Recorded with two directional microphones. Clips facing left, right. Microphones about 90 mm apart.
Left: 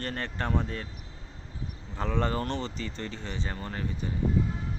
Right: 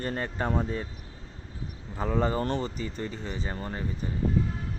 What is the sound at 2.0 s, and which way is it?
Speech, 10° right (ahead or behind).